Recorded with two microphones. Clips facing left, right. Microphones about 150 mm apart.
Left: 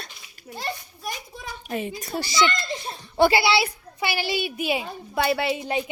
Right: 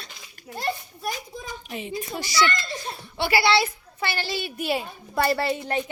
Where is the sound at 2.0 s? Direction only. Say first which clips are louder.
Even; 30° left (ahead or behind).